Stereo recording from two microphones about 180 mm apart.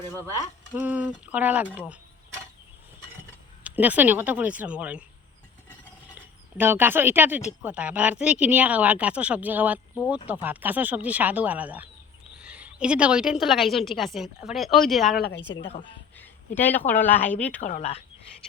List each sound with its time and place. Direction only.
0.3 s speech: 10° right (ahead or behind)
3.6 s speech: 10° right (ahead or behind)
6.1 s a woman's voice: 10° right (ahead or behind)
15.2 s a woman's voice: 70° left (ahead or behind)
16.1 s speech: 10° left (ahead or behind)
17.6 s speech: 40° left (ahead or behind)